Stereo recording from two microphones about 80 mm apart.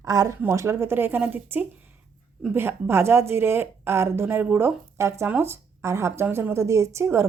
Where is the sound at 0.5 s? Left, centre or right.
Right.